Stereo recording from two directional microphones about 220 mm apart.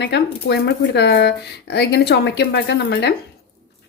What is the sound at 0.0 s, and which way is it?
Speech, 50° left (ahead or behind).